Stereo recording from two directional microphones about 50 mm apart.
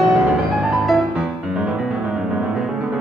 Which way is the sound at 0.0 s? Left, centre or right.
Centre.